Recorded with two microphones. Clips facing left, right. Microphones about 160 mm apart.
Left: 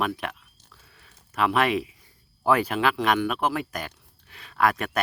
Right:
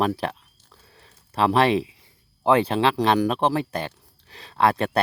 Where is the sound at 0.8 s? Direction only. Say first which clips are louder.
Right 3 dB; 30° right (ahead or behind).